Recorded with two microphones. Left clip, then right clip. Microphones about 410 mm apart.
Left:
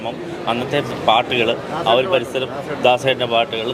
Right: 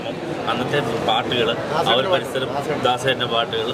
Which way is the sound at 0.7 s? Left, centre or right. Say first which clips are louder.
Left 5 dB; left.